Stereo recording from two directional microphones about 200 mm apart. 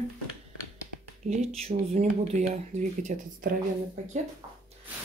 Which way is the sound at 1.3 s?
35° right (ahead or behind).